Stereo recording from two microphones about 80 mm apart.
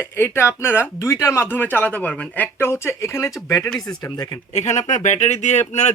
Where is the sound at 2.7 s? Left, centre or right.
Left.